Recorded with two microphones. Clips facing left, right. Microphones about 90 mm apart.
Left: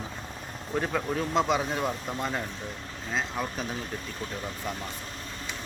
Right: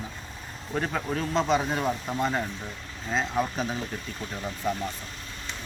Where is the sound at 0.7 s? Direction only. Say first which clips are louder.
Even; 5° left (ahead or behind).